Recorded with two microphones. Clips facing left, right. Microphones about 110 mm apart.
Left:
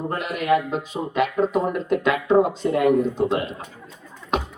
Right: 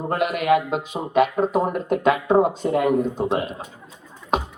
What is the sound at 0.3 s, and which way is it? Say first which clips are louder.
Speech: left 1 dB; 20° right (ahead or behind).